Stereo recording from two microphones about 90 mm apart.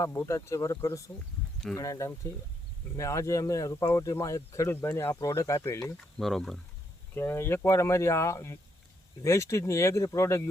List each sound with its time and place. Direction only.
0.0 s speech: 30° left (ahead or behind)
6.1 s speech: 5° left (ahead or behind)
7.1 s speech: 25° left (ahead or behind)